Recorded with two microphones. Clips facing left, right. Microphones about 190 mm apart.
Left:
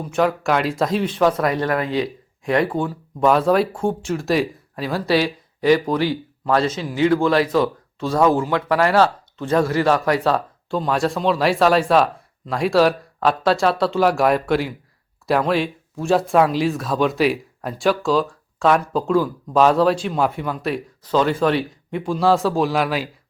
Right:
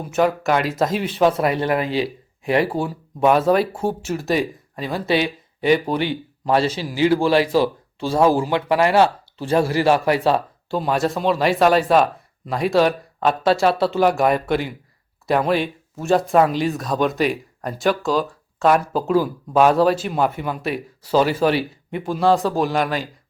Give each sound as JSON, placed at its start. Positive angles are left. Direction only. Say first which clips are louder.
{"t": 0.0, "sound": "speech", "louder": "right 1 dB", "side_deg": -5}
{"t": 1.2, "sound": "a man's voice", "louder": "right 2 dB", "side_deg": -25}
{"t": 2.0, "sound": "speech", "louder": "even", "side_deg": -5}
{"t": 5.9, "sound": "a man's voice", "louder": "left 2 dB", "side_deg": -25}
{"t": 10.7, "sound": "speech", "louder": "even", "side_deg": -5}